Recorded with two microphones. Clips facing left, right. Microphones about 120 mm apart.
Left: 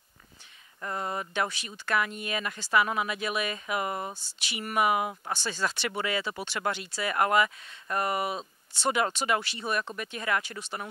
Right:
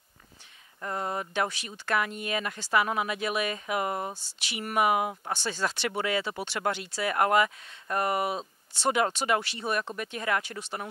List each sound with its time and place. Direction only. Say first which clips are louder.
0.7 s speech: right 1 dB; 35° right (ahead or behind)
4.5 s speech: right 1 dB; 50° right (ahead or behind)
5.2 s speech: right 1 dB; 30° right (ahead or behind)
5.5 s speech: right 1 dB; 40° right (ahead or behind)